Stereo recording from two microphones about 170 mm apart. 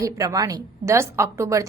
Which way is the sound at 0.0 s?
20° right (ahead or behind).